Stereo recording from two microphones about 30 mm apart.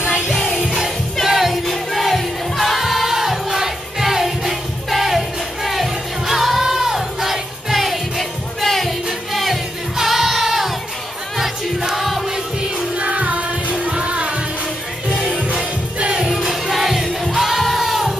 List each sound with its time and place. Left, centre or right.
0.3 s music: centre
1.7 s music: centre
9.3 s music: centre
12.9 s music: right
15.5 s music: right
16.3 s music: centre